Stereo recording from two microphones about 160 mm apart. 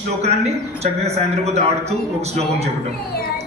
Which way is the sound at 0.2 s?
40° right (ahead or behind).